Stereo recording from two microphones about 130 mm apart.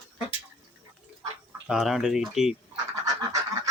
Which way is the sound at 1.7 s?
Centre (ahead or behind).